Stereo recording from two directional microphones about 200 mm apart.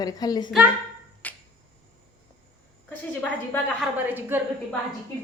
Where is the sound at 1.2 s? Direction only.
10° left (ahead or behind).